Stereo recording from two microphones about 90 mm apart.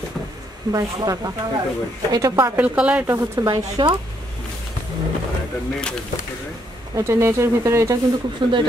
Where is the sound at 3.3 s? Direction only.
45° right (ahead or behind).